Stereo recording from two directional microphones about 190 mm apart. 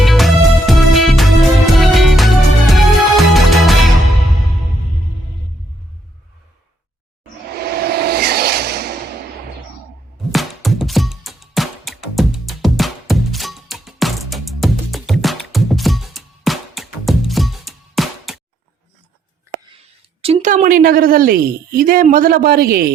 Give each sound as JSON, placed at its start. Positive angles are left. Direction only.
{"t": 0.0, "sound": "music", "side_deg": 0}
{"t": 7.5, "sound": "a sound", "side_deg": -55}
{"t": 10.3, "sound": "music", "side_deg": 0}
{"t": 20.2, "sound": "a woman's voice", "side_deg": -35}